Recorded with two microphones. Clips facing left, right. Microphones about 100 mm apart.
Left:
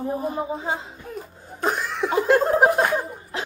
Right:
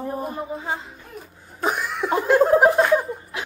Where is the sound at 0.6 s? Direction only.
20° left (ahead or behind).